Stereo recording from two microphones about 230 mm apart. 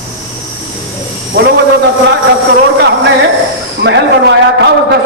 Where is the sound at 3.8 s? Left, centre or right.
Right.